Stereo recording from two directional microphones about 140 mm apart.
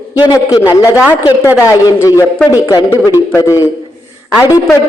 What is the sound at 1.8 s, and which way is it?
A man's voice, 20° left (ahead or behind).